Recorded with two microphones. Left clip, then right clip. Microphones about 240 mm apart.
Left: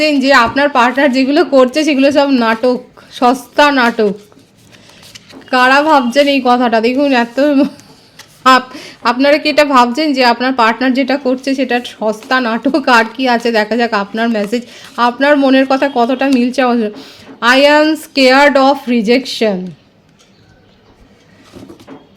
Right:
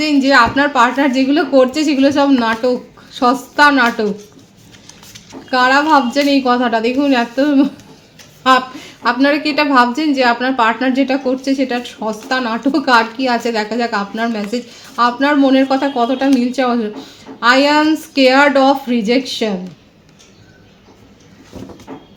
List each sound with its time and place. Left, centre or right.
0.0 s a woman's voice: left
5.5 s a woman's voice: left